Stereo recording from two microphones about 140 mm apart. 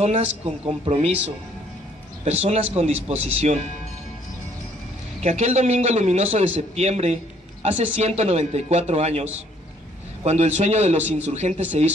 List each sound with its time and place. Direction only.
0.0 s a man's voice: 50° right (ahead or behind)
2.2 s a man's voice: 50° right (ahead or behind)
5.2 s a man's voice: 55° right (ahead or behind)